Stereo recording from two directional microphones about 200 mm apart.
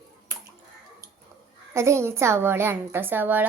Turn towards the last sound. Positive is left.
turn(degrees=-10)  # may be behind; listen again after turning